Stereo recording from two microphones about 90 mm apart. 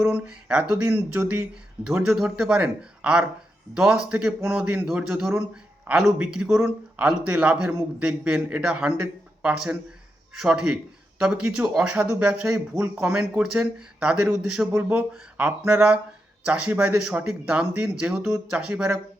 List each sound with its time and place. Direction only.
0.0 s speech: 15° right (ahead or behind)